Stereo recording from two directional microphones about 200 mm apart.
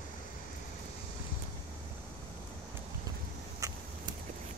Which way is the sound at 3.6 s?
15° right (ahead or behind).